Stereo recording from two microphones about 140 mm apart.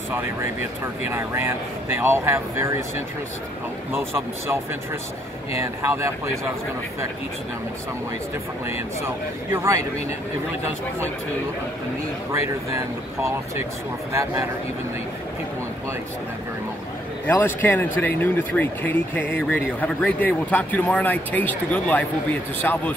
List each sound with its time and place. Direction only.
0.1 s speech: 15° right (ahead or behind)
5.6 s speech: 20° right (ahead or behind)
9.0 s speech: 20° right (ahead or behind)
12.3 s speech: 20° right (ahead or behind)
17.3 s speech: 15° left (ahead or behind)